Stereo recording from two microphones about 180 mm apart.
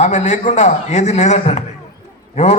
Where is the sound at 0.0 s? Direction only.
40° left (ahead or behind).